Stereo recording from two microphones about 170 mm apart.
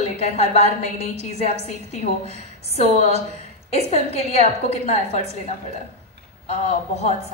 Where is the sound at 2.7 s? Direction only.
40° left (ahead or behind).